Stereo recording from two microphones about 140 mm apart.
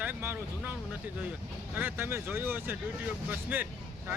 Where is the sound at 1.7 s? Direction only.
15° right (ahead or behind).